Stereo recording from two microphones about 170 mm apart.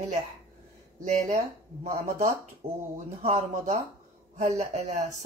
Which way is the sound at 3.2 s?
40° right (ahead or behind).